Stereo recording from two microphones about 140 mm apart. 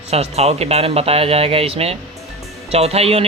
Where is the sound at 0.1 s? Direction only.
50° right (ahead or behind).